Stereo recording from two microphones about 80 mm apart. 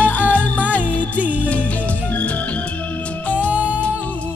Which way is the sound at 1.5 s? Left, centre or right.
Centre.